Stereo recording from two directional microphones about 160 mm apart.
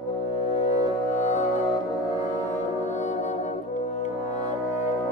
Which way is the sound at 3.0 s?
45° left (ahead or behind).